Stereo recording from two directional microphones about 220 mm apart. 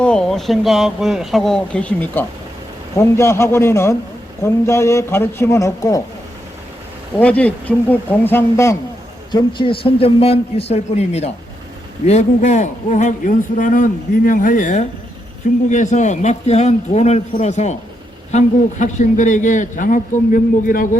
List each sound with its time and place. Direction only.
0.0 s a man's voice: 5° left (ahead or behind)
7.2 s a man's voice: 5° left (ahead or behind)
9.3 s a man's voice: 20° left (ahead or behind); by 20.8 s 40° left (ahead or behind)